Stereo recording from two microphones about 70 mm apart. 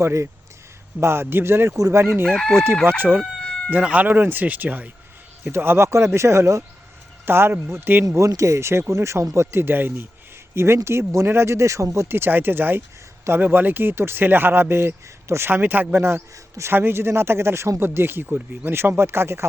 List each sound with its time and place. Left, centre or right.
0.0 s speech: right
2.2 s chicken: centre
3.8 s speech: right
8.0 s speech: right
12.0 s speech: right